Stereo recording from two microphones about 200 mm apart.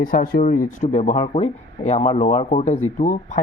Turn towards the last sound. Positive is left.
turn(degrees=40)  # may be behind; listen again after turning